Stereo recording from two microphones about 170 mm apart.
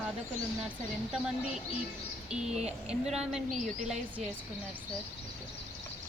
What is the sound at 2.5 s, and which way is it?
Speech, 40° right (ahead or behind).